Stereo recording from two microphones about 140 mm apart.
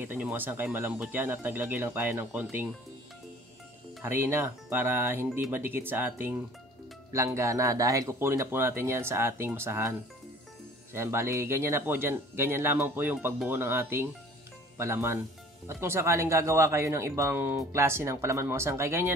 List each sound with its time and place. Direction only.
0.0 s speech: 15° right (ahead or behind)
4.0 s speech: 15° right (ahead or behind)